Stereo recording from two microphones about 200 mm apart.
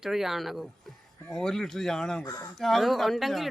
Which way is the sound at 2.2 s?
15° left (ahead or behind).